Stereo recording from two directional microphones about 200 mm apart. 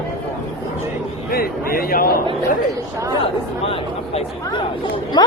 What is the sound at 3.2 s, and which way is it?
Speech, 30° left (ahead or behind).